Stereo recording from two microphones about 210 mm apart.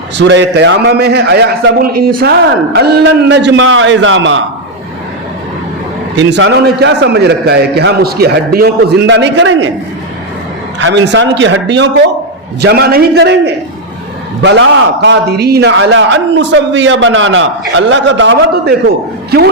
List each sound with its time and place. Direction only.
0.2 s a man's voice: 55° right (ahead or behind)
6.1 s a man's voice: 60° right (ahead or behind)
10.8 s a man's voice: 60° right (ahead or behind)